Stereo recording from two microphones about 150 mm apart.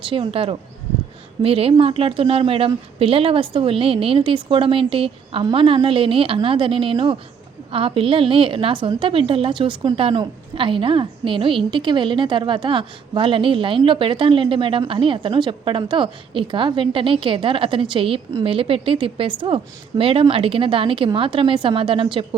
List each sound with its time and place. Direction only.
0.0 s a woman's voice: 35° right (ahead or behind)